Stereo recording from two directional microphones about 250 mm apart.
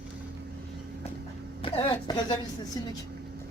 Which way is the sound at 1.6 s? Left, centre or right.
Left.